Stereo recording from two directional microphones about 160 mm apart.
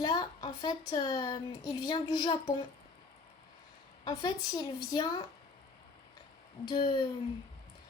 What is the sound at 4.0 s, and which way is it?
A woman's voice, 25° left (ahead or behind).